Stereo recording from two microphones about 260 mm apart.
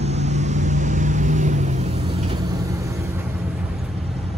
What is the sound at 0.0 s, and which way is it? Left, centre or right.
Vehicle, right.